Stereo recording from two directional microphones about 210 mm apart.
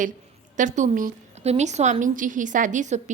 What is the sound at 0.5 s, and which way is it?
A woman's voice, 35° right (ahead or behind).